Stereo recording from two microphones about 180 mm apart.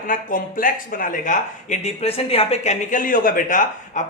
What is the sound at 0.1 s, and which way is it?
Speech, 50° left (ahead or behind).